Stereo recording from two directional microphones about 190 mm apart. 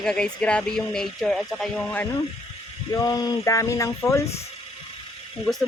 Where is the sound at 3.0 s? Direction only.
20° left (ahead or behind).